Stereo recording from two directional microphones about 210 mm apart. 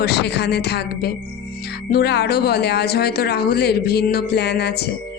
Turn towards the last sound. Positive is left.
turn(degrees=50)  # may be behind; listen again after turning